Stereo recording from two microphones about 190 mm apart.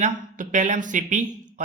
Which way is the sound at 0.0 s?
40° right (ahead or behind).